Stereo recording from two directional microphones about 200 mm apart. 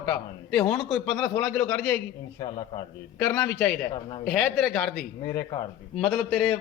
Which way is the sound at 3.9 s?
25° left (ahead or behind).